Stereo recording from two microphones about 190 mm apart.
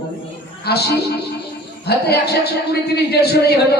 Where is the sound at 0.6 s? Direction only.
60° left (ahead or behind).